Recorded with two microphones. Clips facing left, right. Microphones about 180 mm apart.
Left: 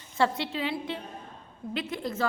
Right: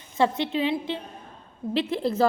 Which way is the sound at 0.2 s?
20° right (ahead or behind).